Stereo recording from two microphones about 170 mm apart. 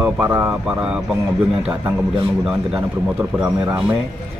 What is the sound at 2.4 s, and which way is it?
Speech, centre (ahead or behind).